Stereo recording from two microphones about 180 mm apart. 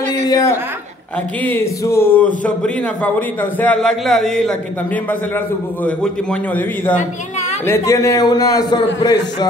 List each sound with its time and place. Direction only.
0.3 s a man's voice: 20° left (ahead or behind)
1.9 s a man's voice: 10° left (ahead or behind)
7.6 s a man's voice: 15° left (ahead or behind)